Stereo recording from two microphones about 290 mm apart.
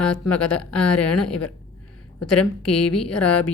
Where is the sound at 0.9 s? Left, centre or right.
Left.